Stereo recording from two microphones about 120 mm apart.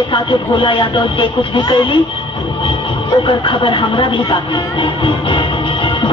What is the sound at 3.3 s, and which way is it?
Speech, 45° left (ahead or behind).